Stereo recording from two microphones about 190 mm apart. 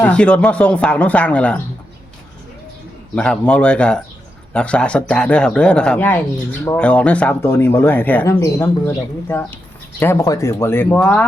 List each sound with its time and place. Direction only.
0.0 s speech: 5° left (ahead or behind)
3.2 s speech: 5° left (ahead or behind)